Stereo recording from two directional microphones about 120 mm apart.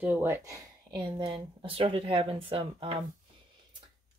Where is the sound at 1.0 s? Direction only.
45° right (ahead or behind).